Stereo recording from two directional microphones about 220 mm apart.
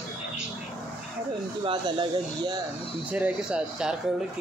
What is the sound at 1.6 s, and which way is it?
Speech, 20° right (ahead or behind).